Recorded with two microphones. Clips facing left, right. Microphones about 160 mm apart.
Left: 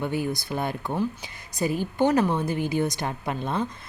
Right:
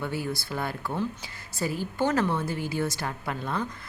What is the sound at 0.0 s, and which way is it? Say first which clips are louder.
A woman's voice: left 4 dB; 20° left (ahead or behind).